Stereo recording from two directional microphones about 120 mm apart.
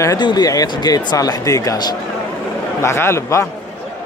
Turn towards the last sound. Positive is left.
turn(degrees=25)  # may be behind; listen again after turning